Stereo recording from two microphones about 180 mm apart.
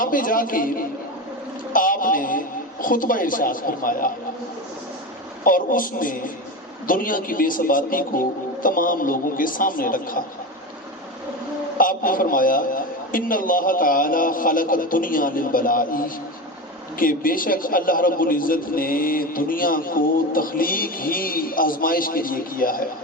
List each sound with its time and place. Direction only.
0.0 s a man's voice: 50° left (ahead or behind)
5.5 s a man's voice: 50° left (ahead or behind)
11.8 s a man's voice: 50° left (ahead or behind)